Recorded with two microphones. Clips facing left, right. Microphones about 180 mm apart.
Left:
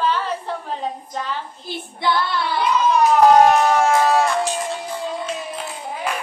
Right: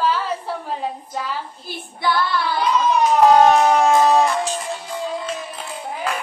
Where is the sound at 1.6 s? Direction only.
20° left (ahead or behind).